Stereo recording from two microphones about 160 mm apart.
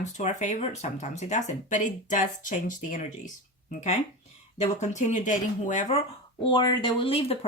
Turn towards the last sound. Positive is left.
turn(degrees=35)  # may be behind; listen again after turning